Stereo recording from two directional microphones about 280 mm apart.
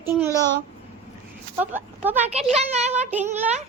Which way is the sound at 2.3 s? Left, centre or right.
Right.